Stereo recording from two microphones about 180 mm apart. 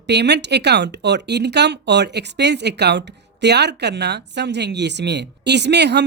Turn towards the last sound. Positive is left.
turn(degrees=-70)  # may be behind; listen again after turning